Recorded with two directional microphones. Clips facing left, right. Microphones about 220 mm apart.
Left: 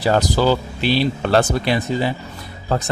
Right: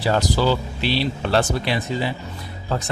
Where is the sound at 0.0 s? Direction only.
45° left (ahead or behind).